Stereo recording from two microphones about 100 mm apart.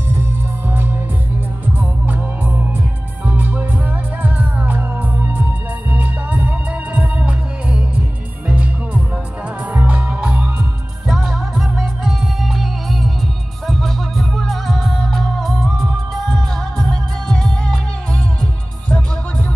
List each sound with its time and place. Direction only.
0.2 s music: 20° right (ahead or behind); by 15.7 s 5° left (ahead or behind)
16.7 s music: 5° left (ahead or behind)